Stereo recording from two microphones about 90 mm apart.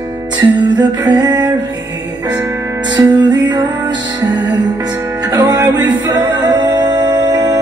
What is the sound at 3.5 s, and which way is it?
Music, 50° right (ahead or behind).